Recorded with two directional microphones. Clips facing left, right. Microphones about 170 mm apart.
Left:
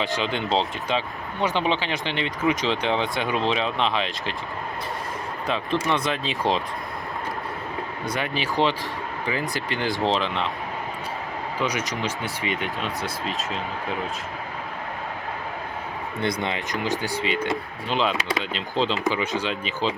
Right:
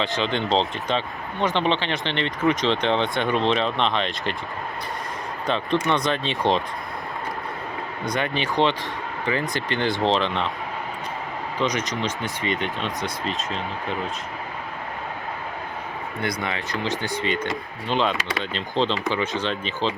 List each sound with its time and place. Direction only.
0.2 s speech: 10° left (ahead or behind)
5.5 s speech: 5° left (ahead or behind)
8.0 s speech: 5° left (ahead or behind)
11.6 s speech: 10° left (ahead or behind)
16.2 s speech: 20° left (ahead or behind)
17.2 s speech: 5° left (ahead or behind)